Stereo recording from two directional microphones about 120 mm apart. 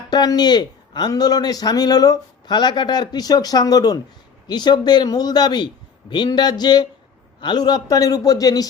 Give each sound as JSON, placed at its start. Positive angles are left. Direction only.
{"t": 0.1, "sound": "speech", "side_deg": 35}